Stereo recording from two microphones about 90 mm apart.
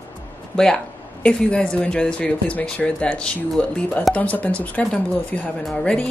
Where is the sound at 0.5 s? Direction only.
10° left (ahead or behind).